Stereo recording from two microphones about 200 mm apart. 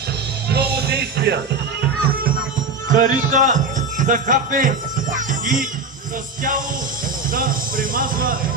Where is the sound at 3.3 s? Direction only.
40° right (ahead or behind).